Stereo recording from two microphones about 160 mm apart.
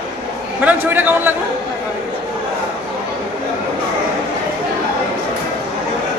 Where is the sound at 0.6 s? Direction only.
10° right (ahead or behind).